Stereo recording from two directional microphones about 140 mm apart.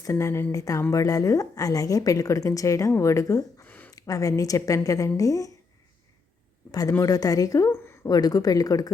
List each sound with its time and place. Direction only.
0.0 s a woman's voice: 20° left (ahead or behind)
3.9 s a woman's voice: 25° left (ahead or behind)
6.7 s a woman's voice: 25° left (ahead or behind)